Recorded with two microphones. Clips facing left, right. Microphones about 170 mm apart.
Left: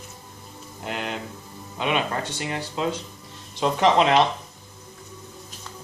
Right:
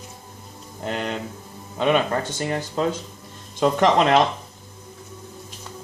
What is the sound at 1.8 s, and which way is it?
Speech, 45° right (ahead or behind).